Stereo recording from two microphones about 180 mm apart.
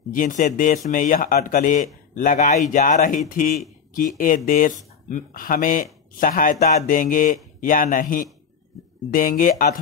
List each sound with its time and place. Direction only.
0.1 s speech: 45° left (ahead or behind)